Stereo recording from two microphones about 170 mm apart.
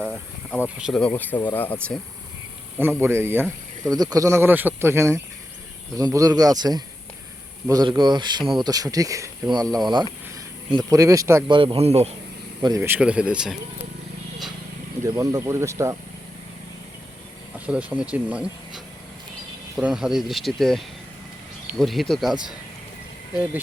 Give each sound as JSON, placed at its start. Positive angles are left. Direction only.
{"t": 0.9, "sound": "speech", "side_deg": 10}
{"t": 3.0, "sound": "speech", "side_deg": -15}
{"t": 11.4, "sound": "speech", "side_deg": -30}
{"t": 12.6, "sound": "speech", "side_deg": -15}
{"t": 13.0, "sound": "speech", "side_deg": -5}
{"t": 15.0, "sound": "speech", "side_deg": -20}
{"t": 17.7, "sound": "speech", "side_deg": -10}
{"t": 19.7, "sound": "speech", "side_deg": -5}